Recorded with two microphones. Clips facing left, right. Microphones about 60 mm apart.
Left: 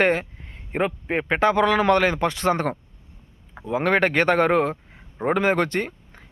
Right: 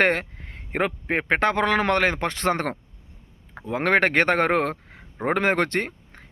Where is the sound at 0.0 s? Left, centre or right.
Right.